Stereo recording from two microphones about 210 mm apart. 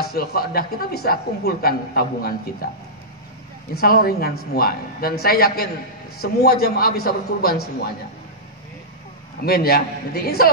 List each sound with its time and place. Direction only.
0.0 s speech: 45° left (ahead or behind)
3.8 s speech: 45° left (ahead or behind)
9.4 s speech: 45° left (ahead or behind)